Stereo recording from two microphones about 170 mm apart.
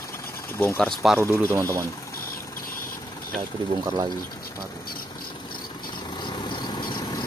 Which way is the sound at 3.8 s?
25° right (ahead or behind).